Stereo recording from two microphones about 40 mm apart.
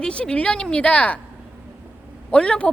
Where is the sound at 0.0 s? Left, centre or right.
Left.